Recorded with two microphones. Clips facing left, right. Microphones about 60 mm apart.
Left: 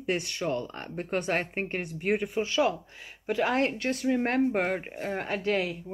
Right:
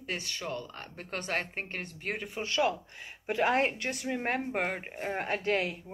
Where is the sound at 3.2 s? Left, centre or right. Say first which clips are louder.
Left 1 dB; centre.